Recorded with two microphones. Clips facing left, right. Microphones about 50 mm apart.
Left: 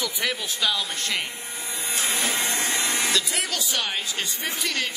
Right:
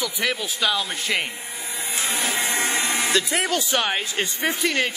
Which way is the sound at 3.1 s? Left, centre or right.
Right.